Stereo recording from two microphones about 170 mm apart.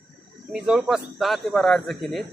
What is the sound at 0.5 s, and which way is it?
Speech, 5° right (ahead or behind).